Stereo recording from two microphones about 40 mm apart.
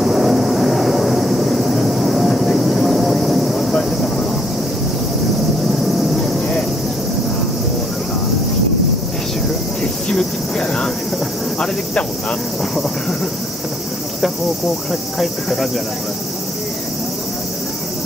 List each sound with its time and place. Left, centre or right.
0.0 s vehicle: centre
10.1 s cricket: centre
14.9 s cricket: centre